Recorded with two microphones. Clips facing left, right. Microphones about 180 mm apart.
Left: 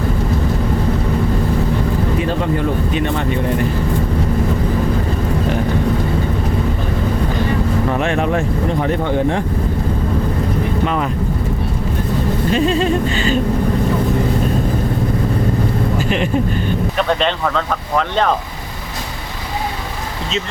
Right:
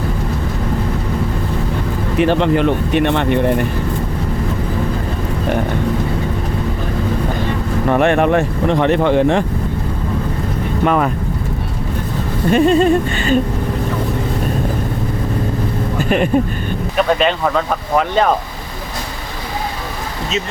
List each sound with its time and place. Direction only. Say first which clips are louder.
2.1 s speech: right 5 dB; 70° right (ahead or behind)
7.9 s speech: right 9 dB; 60° right (ahead or behind); by 9.4 s 85° right
10.8 s speech: right 8 dB; 55° right (ahead or behind)
12.5 s a sound: right 6 dB; 55° right (ahead or behind)
16.0 s vehicle: right 3 dB; 50° right (ahead or behind)
17.0 s speech: right 4 dB; 5° right (ahead or behind)